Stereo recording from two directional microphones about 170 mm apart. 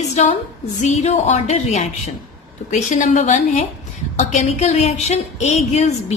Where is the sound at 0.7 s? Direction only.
45° left (ahead or behind).